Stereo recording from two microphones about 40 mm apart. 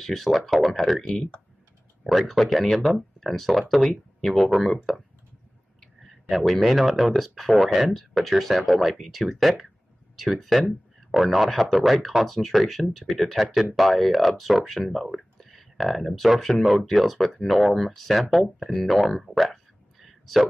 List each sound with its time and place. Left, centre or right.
0.0 s speech: centre
1.0 s speech: centre
2.0 s speech: centre
6.0 s speech: centre
13.0 s speech: centre
13.4 s speech: centre